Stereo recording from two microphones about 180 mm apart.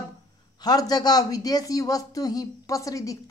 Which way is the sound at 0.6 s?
20° left (ahead or behind).